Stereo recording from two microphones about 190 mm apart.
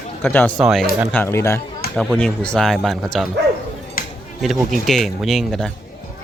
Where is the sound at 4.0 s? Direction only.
50° left (ahead or behind).